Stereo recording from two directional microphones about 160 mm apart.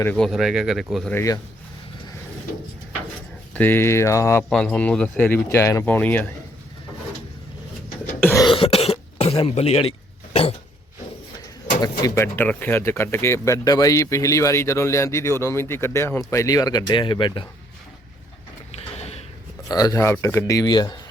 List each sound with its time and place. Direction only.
0.0 s speech: 10° left (ahead or behind)
0.3 s speech: centre (ahead or behind)
1.1 s speech: 20° left (ahead or behind)
3.5 s speech: 10° left (ahead or behind)
4.4 s speech: 5° left (ahead or behind)
8.2 s cough: 15° left (ahead or behind)
8.4 s cough: 35° left (ahead or behind)
9.5 s a man's voice: 40° left (ahead or behind)
11.8 s speech: 25° left (ahead or behind)
18.7 s a sound: 40° left (ahead or behind)
19.6 s speech: 25° left (ahead or behind)